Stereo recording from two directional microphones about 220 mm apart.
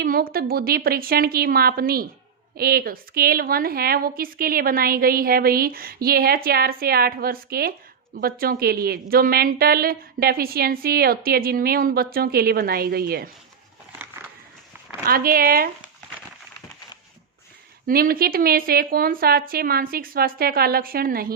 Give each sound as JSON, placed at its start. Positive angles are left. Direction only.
{"t": 0.0, "sound": "a woman's voice", "side_deg": -40}
{"t": 15.0, "sound": "a woman's voice", "side_deg": -40}
{"t": 17.8, "sound": "a woman's voice", "side_deg": -40}